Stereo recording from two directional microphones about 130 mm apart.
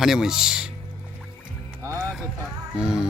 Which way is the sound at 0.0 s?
5° right (ahead or behind).